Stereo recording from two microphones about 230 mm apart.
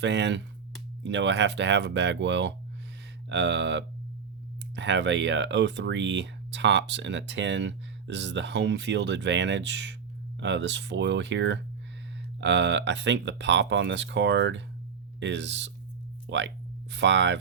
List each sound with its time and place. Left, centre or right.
0.0 s speech: right